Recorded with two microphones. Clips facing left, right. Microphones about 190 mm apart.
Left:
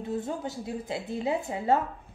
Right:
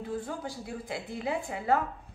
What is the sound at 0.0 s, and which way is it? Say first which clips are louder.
A woman's voice: left 3 dB; 25° left (ahead or behind).